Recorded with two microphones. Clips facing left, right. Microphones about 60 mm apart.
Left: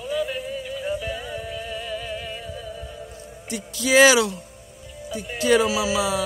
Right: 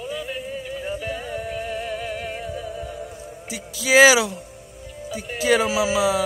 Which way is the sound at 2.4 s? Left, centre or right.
Centre.